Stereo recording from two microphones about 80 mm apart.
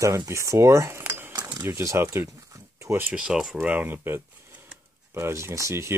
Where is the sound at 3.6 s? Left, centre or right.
Right.